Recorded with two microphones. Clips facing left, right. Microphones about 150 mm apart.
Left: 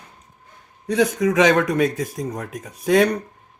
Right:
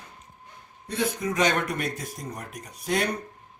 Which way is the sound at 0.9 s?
90° left.